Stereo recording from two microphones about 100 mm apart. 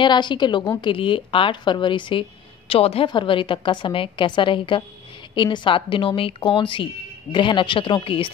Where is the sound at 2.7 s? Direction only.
75° left (ahead or behind).